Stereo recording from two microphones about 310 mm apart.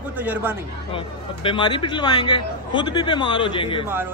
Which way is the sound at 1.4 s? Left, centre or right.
Centre.